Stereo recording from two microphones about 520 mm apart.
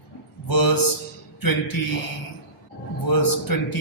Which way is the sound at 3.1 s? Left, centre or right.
Left.